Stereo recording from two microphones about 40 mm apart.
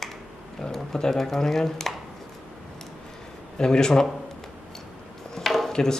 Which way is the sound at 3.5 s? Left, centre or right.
Centre.